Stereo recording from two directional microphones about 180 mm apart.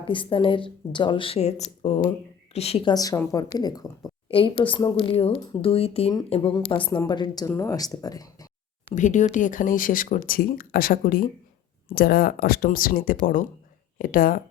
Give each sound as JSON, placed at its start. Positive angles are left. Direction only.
{"t": 0.0, "sound": "a woman's voice", "side_deg": 30}
{"t": 2.9, "sound": "speech", "side_deg": 20}
{"t": 9.0, "sound": "speech", "side_deg": 45}